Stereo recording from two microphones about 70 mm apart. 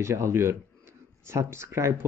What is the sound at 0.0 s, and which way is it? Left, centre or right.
Speech, right.